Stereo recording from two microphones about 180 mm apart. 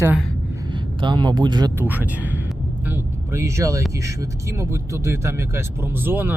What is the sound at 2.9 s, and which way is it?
Vehicle, 15° right (ahead or behind).